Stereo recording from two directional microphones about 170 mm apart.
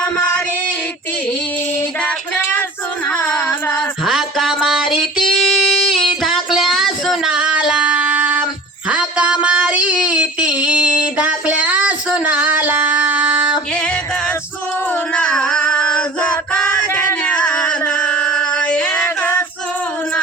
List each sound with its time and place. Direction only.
2.0 s female singing: 10° left (ahead or behind)
3.1 s music: 10° left (ahead or behind)
4.0 s music: centre (ahead or behind)
7.7 s a sound: 5° right (ahead or behind)
13.7 s music: 5° left (ahead or behind)
15.1 s female singing: 5° left (ahead or behind)